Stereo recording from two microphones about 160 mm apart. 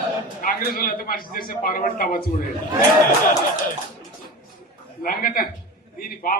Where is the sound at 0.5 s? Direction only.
65° left (ahead or behind).